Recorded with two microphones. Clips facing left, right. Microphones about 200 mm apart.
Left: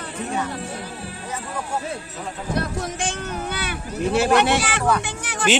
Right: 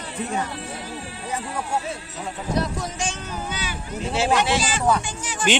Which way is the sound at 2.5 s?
55° left (ahead or behind).